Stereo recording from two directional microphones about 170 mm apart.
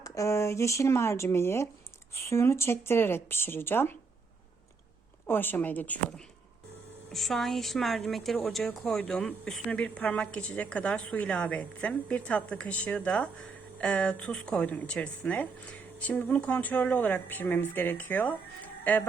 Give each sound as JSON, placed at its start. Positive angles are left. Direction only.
{"t": 0.0, "sound": "speech", "side_deg": 20}
{"t": 5.2, "sound": "a woman's voice", "side_deg": 10}